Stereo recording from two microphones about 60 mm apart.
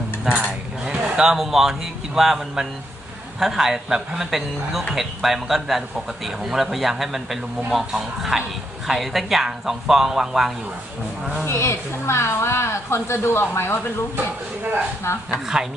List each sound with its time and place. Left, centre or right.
0.4 s a sound: centre
2.1 s a man's voice: centre
11.4 s a woman's voice: left
15.3 s a woman's voice: centre